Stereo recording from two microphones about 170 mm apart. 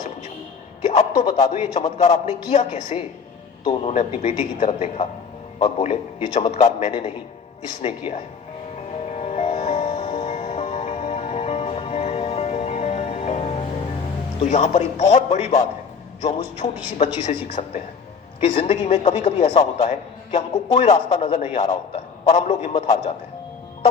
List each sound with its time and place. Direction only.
0.8 s a sound: 40° left (ahead or behind)
1.3 s a man's voice: 40° left (ahead or behind)
3.6 s speech: 30° left (ahead or behind)
3.9 s a man's voice: 40° left (ahead or behind)
9.0 s music: 40° left (ahead or behind)
14.4 s a man's voice: 45° left (ahead or behind)